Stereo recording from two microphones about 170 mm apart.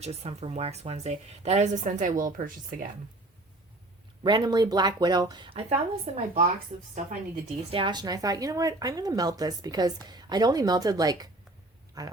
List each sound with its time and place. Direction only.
0.0 s a woman's voice: 40° right (ahead or behind)
4.2 s a woman's voice: 25° right (ahead or behind); by 6.9 s 40° right (ahead or behind)
7.7 s a woman's voice: 30° right (ahead or behind)